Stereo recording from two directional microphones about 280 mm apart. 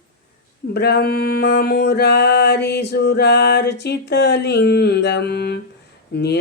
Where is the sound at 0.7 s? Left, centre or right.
Left.